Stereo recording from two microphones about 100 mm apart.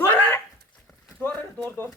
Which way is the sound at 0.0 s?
20° left (ahead or behind).